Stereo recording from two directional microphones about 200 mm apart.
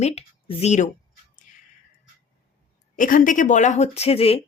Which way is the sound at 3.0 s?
40° left (ahead or behind).